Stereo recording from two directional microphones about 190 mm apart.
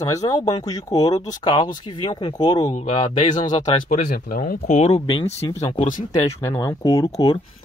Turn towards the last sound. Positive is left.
turn(degrees=20)  # may be behind; listen again after turning